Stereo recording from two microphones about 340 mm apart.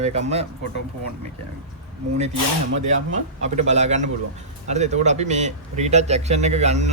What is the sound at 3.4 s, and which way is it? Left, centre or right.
Speech, centre.